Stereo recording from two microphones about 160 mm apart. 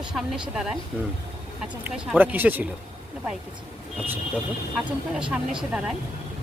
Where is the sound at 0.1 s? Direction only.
Centre (ahead or behind).